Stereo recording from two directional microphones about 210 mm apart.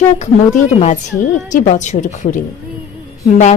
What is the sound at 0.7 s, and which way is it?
A woman's voice, 30° left (ahead or behind).